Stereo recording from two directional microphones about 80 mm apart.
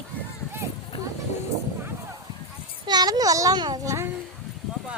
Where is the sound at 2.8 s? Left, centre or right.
Right.